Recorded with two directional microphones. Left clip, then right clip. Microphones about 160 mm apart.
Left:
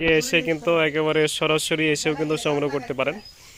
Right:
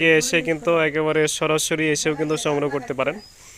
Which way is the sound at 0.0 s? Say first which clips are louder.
Right 2 dB; centre (ahead or behind).